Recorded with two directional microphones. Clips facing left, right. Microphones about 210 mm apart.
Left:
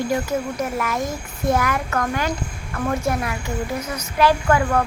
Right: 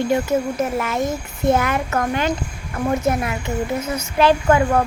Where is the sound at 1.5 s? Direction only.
25° right (ahead or behind).